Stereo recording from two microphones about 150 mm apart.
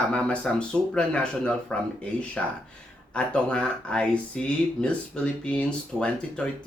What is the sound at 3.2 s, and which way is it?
Speech, 5° left (ahead or behind).